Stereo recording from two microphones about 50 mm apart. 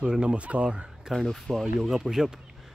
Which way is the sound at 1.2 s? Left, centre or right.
Centre.